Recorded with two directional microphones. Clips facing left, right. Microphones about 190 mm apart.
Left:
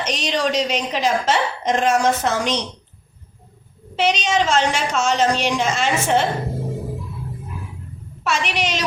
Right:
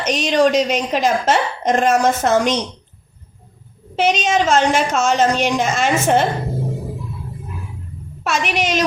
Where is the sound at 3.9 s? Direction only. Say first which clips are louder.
Right 2 dB; 45° right (ahead or behind).